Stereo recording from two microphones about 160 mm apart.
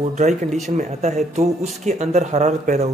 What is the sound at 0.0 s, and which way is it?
Speech, 50° right (ahead or behind).